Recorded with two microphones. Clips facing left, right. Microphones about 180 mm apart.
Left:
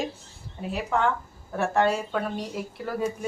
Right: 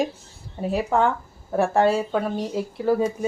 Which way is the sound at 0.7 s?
40° right (ahead or behind).